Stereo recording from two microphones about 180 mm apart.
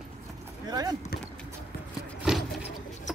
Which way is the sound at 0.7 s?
20° right (ahead or behind).